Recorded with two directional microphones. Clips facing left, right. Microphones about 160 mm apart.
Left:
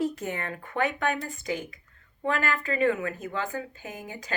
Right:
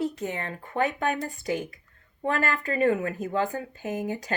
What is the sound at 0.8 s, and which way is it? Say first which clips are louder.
Speech: right 1 dB; 40° right (ahead or behind).